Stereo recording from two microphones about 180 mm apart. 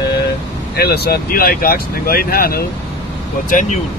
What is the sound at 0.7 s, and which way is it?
Speech, 60° left (ahead or behind).